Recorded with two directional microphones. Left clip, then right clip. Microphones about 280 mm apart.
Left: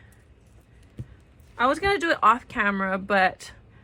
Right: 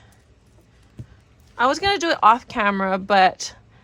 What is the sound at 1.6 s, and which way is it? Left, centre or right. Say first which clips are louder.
Speech: right 3 dB; centre.